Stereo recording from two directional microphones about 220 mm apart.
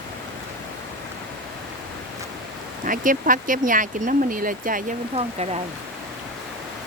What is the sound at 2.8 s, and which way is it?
Speech, 40° right (ahead or behind).